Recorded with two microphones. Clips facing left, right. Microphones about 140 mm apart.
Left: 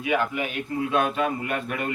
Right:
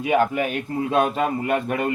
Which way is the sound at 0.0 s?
40° right (ahead or behind).